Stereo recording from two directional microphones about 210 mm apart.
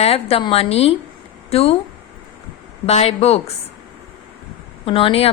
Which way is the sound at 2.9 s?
30° left (ahead or behind).